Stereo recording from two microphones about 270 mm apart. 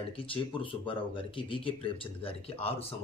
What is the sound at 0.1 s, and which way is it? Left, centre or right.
Speech, centre.